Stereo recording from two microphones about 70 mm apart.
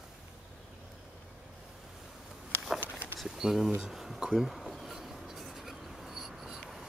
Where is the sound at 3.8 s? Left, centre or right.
Centre.